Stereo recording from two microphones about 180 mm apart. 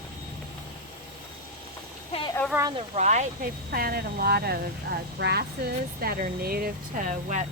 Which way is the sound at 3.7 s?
55° right (ahead or behind).